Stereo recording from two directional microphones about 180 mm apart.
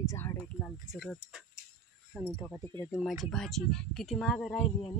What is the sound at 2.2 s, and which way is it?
Speech, 5° right (ahead or behind).